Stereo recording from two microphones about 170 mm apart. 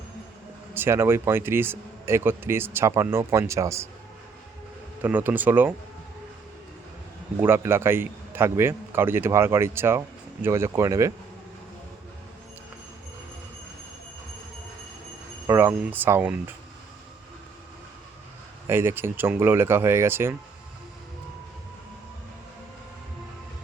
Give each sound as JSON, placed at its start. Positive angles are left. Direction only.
{"t": 0.7, "sound": "speech", "side_deg": -15}
{"t": 5.0, "sound": "speech", "side_deg": -10}
{"t": 7.3, "sound": "speech", "side_deg": -15}
{"t": 15.4, "sound": "speech", "side_deg": -15}
{"t": 18.7, "sound": "speech", "side_deg": -15}